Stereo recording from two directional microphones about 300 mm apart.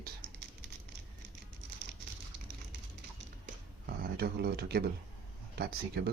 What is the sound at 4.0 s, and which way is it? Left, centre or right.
Speech, right.